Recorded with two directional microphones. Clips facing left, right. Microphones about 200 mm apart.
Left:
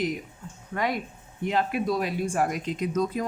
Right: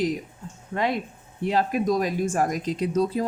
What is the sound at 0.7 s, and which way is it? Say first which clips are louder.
Speech: right 3 dB; 25° right (ahead or behind).